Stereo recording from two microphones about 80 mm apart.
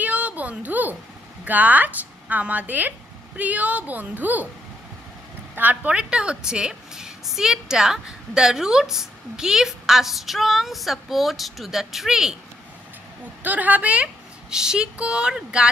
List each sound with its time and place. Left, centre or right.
0.0 s a sound: centre
1.4 s a woman's voice: centre
5.6 s a woman's voice: centre
13.4 s a woman's voice: right